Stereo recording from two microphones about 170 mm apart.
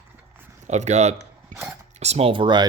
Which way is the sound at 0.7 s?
40° right (ahead or behind).